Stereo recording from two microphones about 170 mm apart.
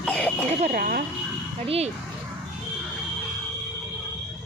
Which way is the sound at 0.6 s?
50° right (ahead or behind).